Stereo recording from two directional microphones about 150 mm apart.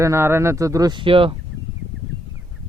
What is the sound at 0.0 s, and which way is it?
Speech, 15° right (ahead or behind).